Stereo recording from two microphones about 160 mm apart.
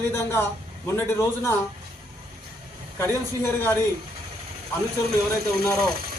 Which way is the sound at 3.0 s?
15° left (ahead or behind).